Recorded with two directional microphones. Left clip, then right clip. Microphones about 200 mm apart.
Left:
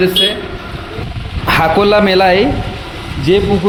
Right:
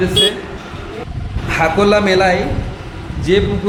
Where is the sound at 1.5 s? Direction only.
45° left (ahead or behind).